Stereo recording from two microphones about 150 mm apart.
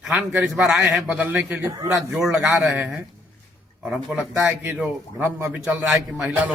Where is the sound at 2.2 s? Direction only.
Centre (ahead or behind).